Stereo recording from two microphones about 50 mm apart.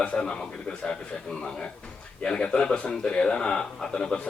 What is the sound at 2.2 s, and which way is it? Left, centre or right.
A man's voice, centre.